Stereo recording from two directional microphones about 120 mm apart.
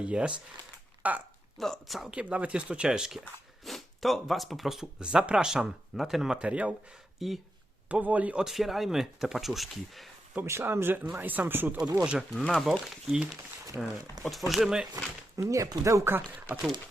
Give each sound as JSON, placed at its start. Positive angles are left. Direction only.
{"t": 0.0, "sound": "speech", "side_deg": -10}
{"t": 1.5, "sound": "speech", "side_deg": 0}
{"t": 10.4, "sound": "speech", "side_deg": -20}
{"t": 12.3, "sound": "speech", "side_deg": 5}
{"t": 15.4, "sound": "speech", "side_deg": -25}